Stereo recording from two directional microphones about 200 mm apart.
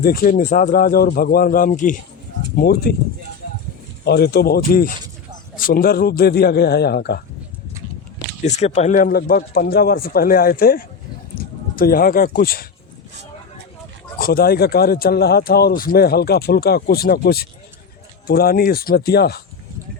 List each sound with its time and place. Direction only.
0.0 s speech: 50° left (ahead or behind)
4.0 s speech: 55° left (ahead or behind)
8.4 s speech: 35° left (ahead or behind)
14.2 s speech: 45° left (ahead or behind)